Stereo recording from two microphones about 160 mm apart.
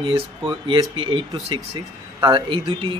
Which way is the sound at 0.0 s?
35° right (ahead or behind).